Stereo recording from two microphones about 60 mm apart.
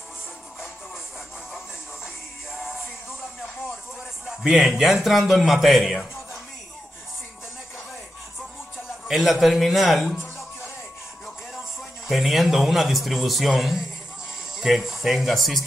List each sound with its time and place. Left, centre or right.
4.3 s a man's voice: centre
9.0 s a man's voice: centre
10.1 s music: left
12.1 s a man's voice: centre